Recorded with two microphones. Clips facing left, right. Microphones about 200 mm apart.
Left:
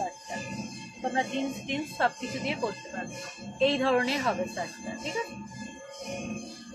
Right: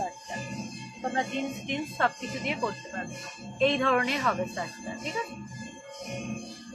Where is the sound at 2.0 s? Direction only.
30° left (ahead or behind).